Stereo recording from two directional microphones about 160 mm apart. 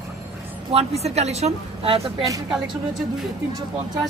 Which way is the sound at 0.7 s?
40° right (ahead or behind).